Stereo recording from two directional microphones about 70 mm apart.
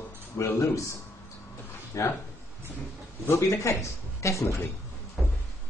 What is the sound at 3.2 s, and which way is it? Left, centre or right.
Speech, left.